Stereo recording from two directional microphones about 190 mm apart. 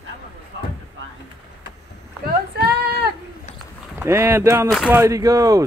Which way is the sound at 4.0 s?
15° right (ahead or behind).